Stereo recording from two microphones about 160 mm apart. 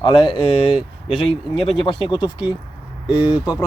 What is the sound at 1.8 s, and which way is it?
Speech, 30° left (ahead or behind).